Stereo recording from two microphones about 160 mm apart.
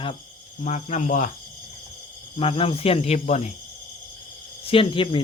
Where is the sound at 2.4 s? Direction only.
35° left (ahead or behind).